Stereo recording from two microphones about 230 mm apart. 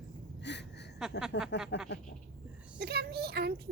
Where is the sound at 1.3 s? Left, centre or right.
Left.